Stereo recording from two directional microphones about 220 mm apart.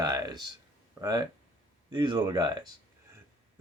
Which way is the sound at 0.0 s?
15° right (ahead or behind).